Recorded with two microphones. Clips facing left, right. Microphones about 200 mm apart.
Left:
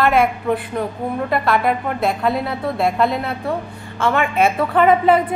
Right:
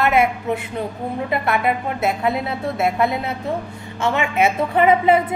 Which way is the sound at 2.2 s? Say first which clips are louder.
Left 1 dB; 20° right (ahead or behind).